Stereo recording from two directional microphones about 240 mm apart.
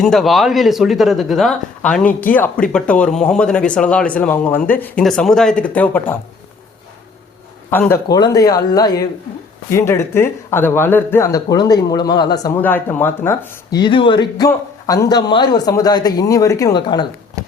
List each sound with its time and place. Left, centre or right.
0.0 s speech: centre
7.7 s speech: centre